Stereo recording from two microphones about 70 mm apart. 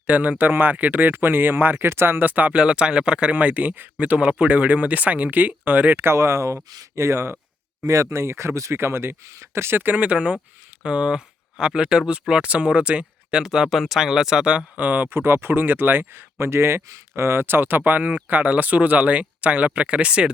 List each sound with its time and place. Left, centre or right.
0.1 s speech: right